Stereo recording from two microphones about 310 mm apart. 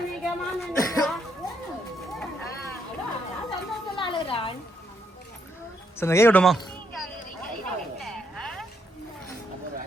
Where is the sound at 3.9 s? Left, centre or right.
Centre.